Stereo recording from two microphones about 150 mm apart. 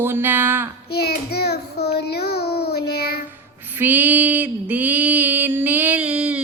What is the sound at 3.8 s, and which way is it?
Female singing, 10° right (ahead or behind).